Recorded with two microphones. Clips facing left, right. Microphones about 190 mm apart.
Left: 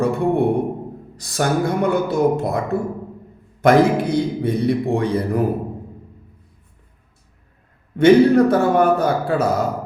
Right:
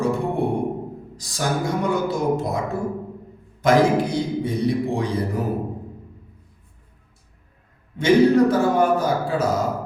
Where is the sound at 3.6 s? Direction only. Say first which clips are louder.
Left 3 dB; 60° left (ahead or behind).